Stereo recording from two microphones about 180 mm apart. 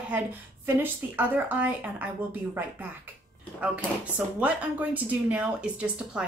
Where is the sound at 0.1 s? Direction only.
10° right (ahead or behind).